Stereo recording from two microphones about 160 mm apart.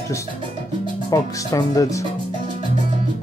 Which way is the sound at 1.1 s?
20° left (ahead or behind).